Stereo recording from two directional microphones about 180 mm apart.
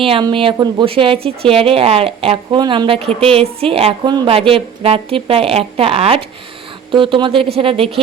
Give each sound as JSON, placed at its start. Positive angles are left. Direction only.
{"t": 0.0, "sound": "speech", "side_deg": -30}